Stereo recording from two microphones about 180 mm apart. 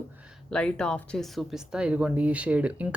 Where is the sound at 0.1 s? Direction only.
5° right (ahead or behind).